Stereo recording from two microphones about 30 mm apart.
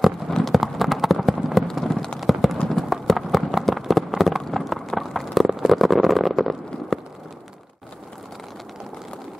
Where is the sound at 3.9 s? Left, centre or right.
Centre.